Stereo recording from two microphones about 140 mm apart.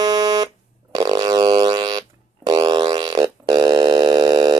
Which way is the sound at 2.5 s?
30° right (ahead or behind).